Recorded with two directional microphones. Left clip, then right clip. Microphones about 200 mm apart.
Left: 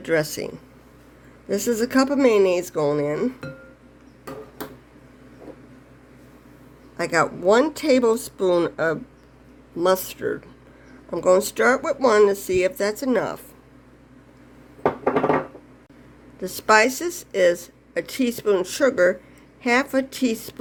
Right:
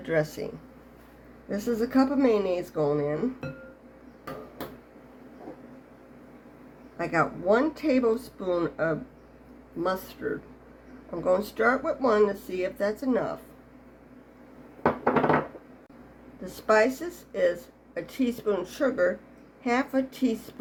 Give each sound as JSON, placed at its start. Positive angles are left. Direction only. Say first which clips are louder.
{"t": 0.0, "sound": "speech", "louder": "left 5 dB", "side_deg": 40}
{"t": 1.5, "sound": "speech", "louder": "left 6 dB", "side_deg": 55}
{"t": 6.9, "sound": "speech", "louder": "left 5 dB", "side_deg": 55}
{"t": 16.4, "sound": "speech", "louder": "left 6 dB", "side_deg": 45}